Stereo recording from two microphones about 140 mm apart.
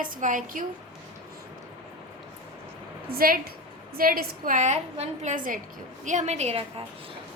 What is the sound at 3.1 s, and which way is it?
A woman's voice, 90° right.